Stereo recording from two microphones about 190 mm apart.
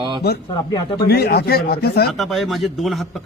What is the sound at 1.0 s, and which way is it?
Speech, 60° left (ahead or behind).